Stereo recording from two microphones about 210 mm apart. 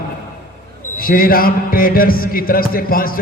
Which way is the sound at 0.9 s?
45° left (ahead or behind).